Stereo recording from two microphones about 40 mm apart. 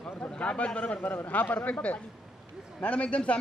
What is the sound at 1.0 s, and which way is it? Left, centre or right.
Speech, left.